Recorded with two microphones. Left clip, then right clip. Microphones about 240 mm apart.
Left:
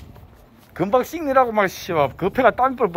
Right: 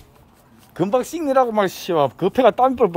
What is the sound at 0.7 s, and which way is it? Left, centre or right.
Speech, centre.